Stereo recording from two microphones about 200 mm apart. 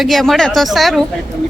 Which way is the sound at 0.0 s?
Centre (ahead or behind).